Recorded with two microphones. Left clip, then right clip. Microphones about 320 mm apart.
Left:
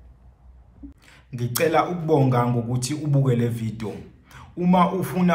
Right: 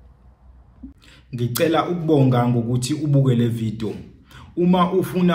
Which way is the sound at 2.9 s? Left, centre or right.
Centre.